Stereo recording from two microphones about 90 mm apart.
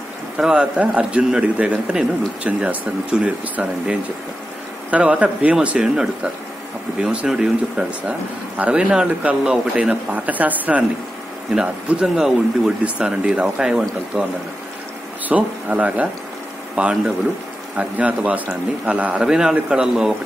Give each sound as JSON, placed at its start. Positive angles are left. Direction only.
{"t": 0.4, "sound": "speech", "side_deg": -10}
{"t": 4.9, "sound": "speech", "side_deg": -15}
{"t": 15.2, "sound": "speech", "side_deg": -15}